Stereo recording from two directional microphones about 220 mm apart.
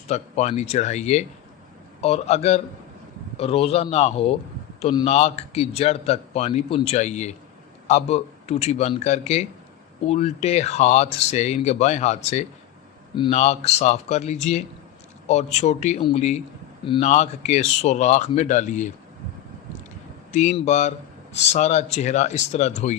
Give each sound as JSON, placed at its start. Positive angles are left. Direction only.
{"t": 0.1, "sound": "a man's voice", "side_deg": 30}
{"t": 20.3, "sound": "speech", "side_deg": 30}